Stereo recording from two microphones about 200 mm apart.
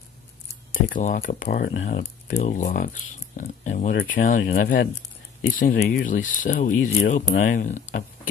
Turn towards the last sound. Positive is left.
turn(degrees=40)  # may be behind; listen again after turning